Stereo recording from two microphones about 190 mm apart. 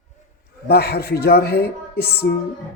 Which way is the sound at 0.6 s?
55° left (ahead or behind).